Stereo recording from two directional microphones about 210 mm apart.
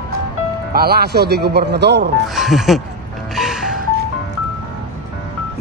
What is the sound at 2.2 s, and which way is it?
Speech, centre (ahead or behind).